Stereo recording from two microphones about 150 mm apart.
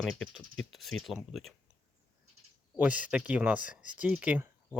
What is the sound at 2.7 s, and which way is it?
Speech, 10° right (ahead or behind).